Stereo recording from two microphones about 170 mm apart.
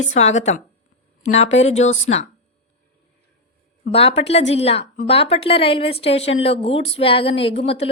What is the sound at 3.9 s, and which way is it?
A woman's voice, 35° left (ahead or behind).